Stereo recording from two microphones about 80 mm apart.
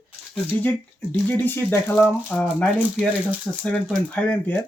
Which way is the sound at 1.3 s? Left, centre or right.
Left.